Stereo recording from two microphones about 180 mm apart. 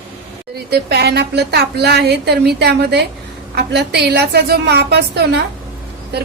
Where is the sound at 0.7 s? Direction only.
65° right (ahead or behind).